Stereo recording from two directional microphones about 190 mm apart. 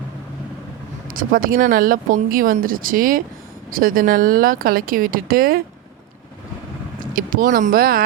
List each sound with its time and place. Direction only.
1.1 s speech: 45° right (ahead or behind)
7.1 s speech: 45° right (ahead or behind)